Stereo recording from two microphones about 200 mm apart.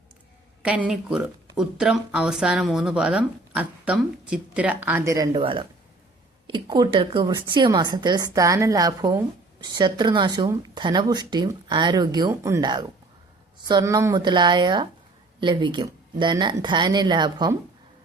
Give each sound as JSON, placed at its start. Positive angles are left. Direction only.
{"t": 0.6, "sound": "speech", "side_deg": -5}